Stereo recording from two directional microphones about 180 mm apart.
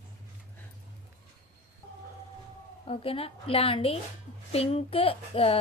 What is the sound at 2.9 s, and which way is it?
A child's voice, 30° left (ahead or behind).